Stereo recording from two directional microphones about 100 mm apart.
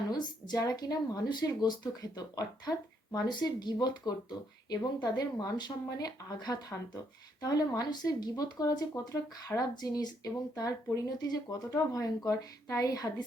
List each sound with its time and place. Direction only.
0.1 s a woman's voice: 45° left (ahead or behind)